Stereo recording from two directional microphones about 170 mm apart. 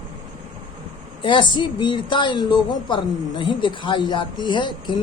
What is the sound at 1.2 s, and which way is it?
Speech, 30° left (ahead or behind).